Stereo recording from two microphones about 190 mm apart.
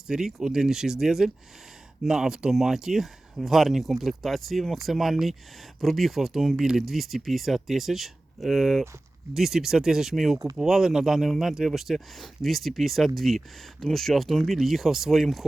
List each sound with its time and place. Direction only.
0.1 s speech: centre (ahead or behind)
10.3 s speech: 20° right (ahead or behind)
10.6 s speech: centre (ahead or behind)